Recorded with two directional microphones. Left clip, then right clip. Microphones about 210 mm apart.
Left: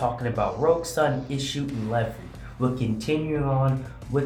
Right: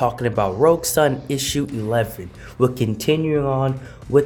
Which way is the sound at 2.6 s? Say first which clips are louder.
Right 8 dB; 50° right (ahead or behind).